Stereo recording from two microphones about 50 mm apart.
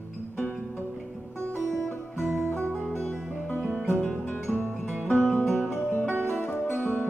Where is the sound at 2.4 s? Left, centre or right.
Right.